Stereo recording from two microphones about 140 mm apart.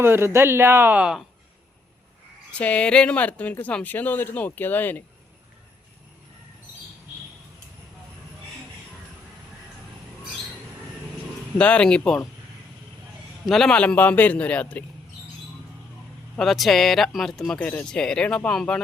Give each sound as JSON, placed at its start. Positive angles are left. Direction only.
{"t": 0.0, "sound": "speech", "side_deg": -20}
{"t": 2.5, "sound": "speech", "side_deg": 10}
{"t": 11.5, "sound": "speech", "side_deg": 10}
{"t": 13.4, "sound": "speech", "side_deg": 5}
{"t": 16.4, "sound": "speech", "side_deg": 0}